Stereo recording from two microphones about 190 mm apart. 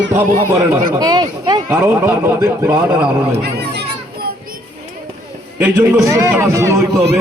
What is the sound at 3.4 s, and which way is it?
Speech, 60° right (ahead or behind).